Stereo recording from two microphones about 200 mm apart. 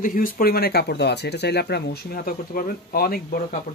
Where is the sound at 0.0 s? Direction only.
45° left (ahead or behind).